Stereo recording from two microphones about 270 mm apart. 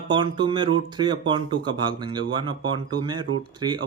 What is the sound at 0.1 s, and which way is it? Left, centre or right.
Speech, centre.